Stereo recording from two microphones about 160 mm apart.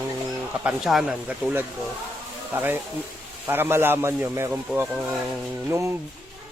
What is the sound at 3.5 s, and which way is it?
A man's voice, 15° right (ahead or behind).